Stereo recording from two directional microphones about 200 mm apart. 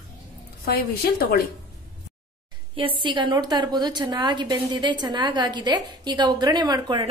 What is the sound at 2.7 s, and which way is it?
A woman's voice, 25° right (ahead or behind).